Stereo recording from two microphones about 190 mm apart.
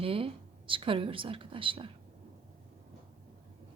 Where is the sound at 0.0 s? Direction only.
30° right (ahead or behind).